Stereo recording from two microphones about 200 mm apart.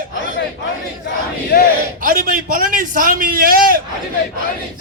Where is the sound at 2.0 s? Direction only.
40° right (ahead or behind).